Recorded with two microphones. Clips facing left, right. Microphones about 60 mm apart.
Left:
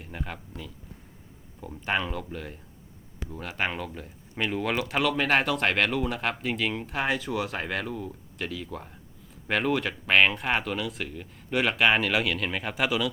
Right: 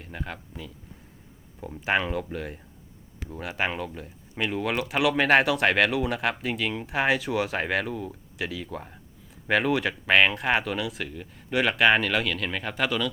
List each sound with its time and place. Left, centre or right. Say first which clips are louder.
0.0 s speech: right 1 dB; centre
7.0 s speech: right 4 dB; right
7.7 s speech: right 4 dB; centre